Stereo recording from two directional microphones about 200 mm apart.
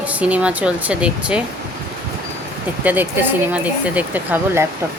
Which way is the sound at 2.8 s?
10° right (ahead or behind).